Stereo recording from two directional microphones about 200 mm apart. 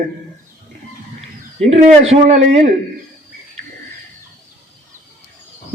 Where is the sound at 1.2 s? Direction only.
30° right (ahead or behind).